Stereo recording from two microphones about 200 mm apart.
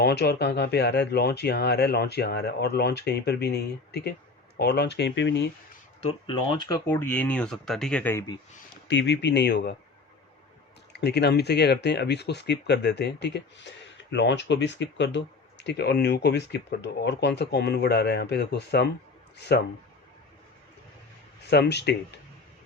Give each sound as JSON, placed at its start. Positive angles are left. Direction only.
{"t": 0.0, "sound": "speech", "side_deg": 55}
{"t": 6.0, "sound": "speech", "side_deg": 25}
{"t": 6.7, "sound": "speech", "side_deg": 10}
{"t": 8.9, "sound": "speech", "side_deg": 65}
{"t": 10.9, "sound": "speech", "side_deg": 55}
{"t": 21.4, "sound": "speech", "side_deg": 55}